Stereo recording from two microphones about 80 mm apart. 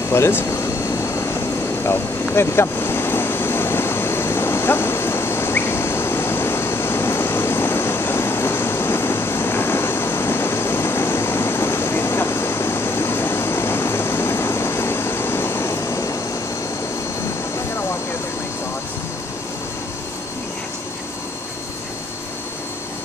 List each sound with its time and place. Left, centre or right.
0.1 s vehicle: left